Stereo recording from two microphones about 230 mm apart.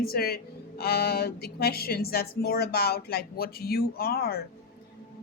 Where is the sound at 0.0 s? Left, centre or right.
Left.